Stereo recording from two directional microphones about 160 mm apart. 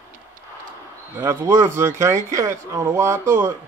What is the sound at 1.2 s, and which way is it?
Speech, 15° right (ahead or behind).